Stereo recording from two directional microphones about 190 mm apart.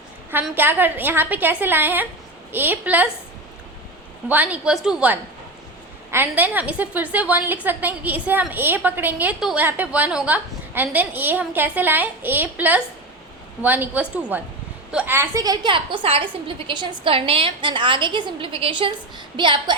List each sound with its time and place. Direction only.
0.5 s a woman's voice: 10° right (ahead or behind)
4.3 s a woman's voice: 10° right (ahead or behind); by 19.7 s 25° right (ahead or behind)